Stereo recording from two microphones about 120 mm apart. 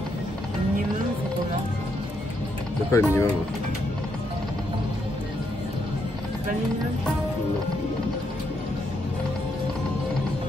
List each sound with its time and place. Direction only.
2.9 s speech: 25° left (ahead or behind)